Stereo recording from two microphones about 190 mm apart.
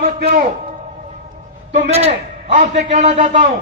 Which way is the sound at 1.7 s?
35° right (ahead or behind).